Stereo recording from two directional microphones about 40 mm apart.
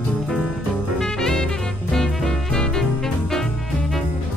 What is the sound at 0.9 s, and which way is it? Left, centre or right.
Music, centre.